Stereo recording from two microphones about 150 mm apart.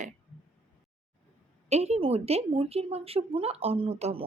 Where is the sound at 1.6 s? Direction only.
45° right (ahead or behind).